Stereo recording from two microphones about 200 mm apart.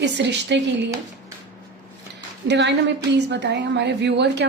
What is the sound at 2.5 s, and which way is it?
A woman's voice, 60° right (ahead or behind).